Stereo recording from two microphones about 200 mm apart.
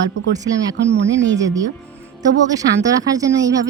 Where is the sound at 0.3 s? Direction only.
20° right (ahead or behind).